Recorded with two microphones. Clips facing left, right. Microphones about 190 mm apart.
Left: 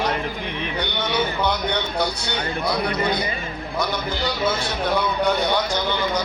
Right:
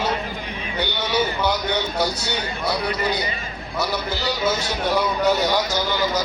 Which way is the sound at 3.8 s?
5° right (ahead or behind).